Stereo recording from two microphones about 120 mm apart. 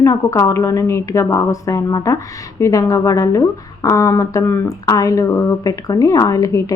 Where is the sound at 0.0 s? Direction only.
25° left (ahead or behind).